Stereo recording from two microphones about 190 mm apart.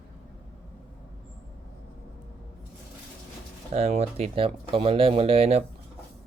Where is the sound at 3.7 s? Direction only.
35° right (ahead or behind).